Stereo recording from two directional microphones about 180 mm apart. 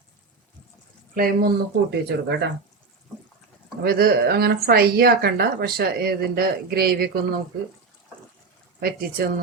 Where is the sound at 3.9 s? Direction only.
60° right (ahead or behind).